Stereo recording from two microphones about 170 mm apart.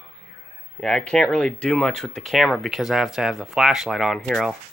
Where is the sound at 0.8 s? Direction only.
5° left (ahead or behind).